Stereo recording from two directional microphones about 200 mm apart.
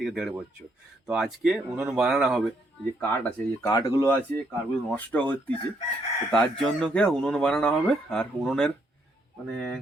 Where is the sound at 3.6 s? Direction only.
15° left (ahead or behind).